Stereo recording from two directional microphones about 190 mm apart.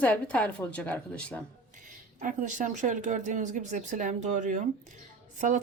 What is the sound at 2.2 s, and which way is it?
Speech, 40° right (ahead or behind).